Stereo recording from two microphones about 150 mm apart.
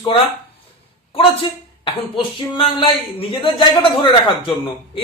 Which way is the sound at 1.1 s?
40° left (ahead or behind).